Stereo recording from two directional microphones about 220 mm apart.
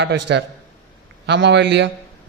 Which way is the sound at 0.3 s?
55° right (ahead or behind).